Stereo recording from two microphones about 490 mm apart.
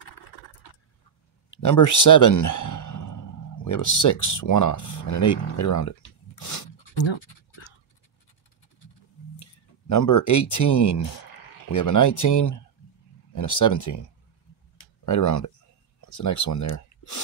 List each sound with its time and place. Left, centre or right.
1.5 s speech: left
6.4 s a sound: left
6.9 s scratch: left
9.4 s speech: left
15.0 s speech: left